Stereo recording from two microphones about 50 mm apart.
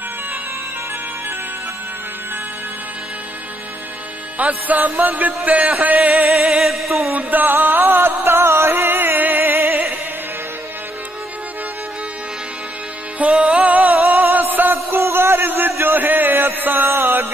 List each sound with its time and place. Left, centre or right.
4.4 s music: right
5.9 s a sound: right
6.6 s music: centre
7.2 s music: right
13.4 s music: right
14.3 s a sound: right